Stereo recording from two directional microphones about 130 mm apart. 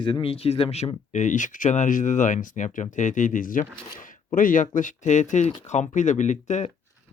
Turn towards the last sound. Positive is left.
turn(degrees=65)  # may be behind; listen again after turning